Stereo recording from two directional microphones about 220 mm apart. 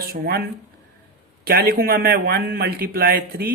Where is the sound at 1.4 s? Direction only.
45° right (ahead or behind).